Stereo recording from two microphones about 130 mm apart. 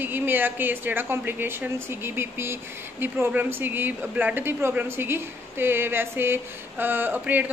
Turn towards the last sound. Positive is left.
turn(degrees=-15)  # may be behind; listen again after turning